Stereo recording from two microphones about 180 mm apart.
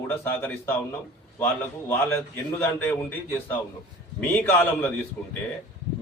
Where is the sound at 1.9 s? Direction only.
10° left (ahead or behind).